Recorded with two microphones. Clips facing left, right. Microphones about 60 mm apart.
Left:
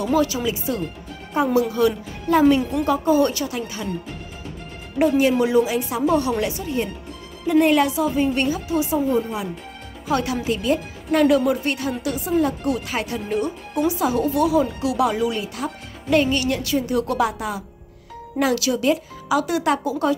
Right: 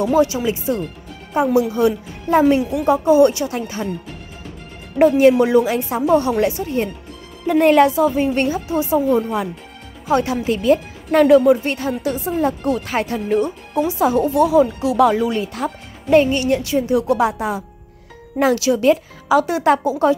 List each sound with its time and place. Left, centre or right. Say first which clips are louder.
0.0 s speech: right 4 dB; right
1.3 s a woman's voice: right 3 dB; centre
2.6 s a woman's voice: right 2 dB; centre
2.9 s a woman's voice: right 6 dB; right
5.0 s a woman's voice: right 6 dB; right
9.1 s speech: right 4 dB; right
10.0 s a woman's voice: right 4 dB; right